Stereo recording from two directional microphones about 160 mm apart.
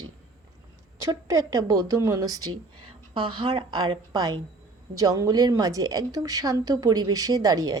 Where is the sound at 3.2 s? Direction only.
30° right (ahead or behind).